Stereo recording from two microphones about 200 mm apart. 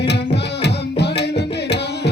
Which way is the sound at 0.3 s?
55° left (ahead or behind).